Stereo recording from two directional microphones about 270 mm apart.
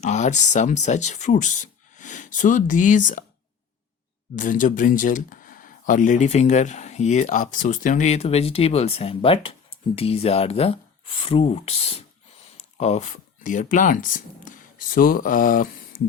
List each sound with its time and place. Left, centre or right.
0.0 s speech: left
4.4 s speech: left